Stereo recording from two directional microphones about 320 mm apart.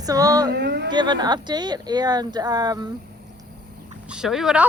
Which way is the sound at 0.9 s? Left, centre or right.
Centre.